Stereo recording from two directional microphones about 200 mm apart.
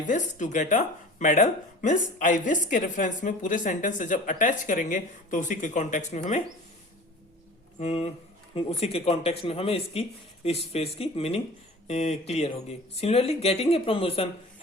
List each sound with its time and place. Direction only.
0.1 s speech: 40° left (ahead or behind)
7.8 s speech: 30° left (ahead or behind)